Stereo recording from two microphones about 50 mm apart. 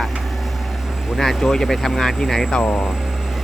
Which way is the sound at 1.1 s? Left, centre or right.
Centre.